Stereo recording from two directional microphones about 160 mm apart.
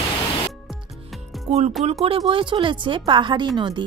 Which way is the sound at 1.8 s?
40° right (ahead or behind).